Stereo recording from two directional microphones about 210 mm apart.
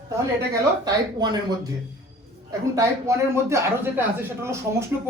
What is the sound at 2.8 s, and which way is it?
A man's voice, 15° right (ahead or behind).